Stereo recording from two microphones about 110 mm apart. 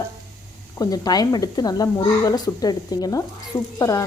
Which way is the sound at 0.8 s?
35° left (ahead or behind).